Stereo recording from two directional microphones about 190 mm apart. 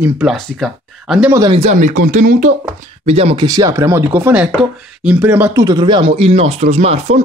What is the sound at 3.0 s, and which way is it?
Speech, 30° right (ahead or behind).